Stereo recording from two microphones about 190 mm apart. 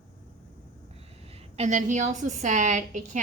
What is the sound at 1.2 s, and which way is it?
A woman's voice, 30° right (ahead or behind).